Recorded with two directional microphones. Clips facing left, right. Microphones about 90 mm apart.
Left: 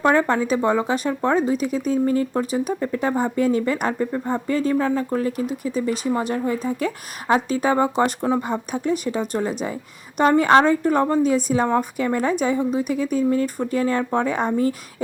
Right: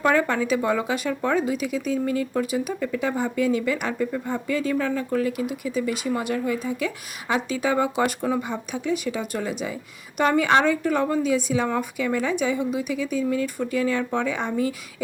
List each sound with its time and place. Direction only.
0.0 s speech: 30° left (ahead or behind)
8.4 s speech: 45° left (ahead or behind)